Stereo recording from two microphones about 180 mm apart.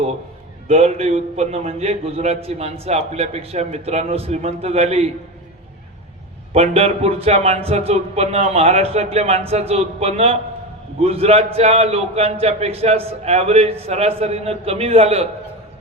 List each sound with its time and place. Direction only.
0.7 s a man's voice: 35° right (ahead or behind)
6.5 s a man's voice: 35° right (ahead or behind)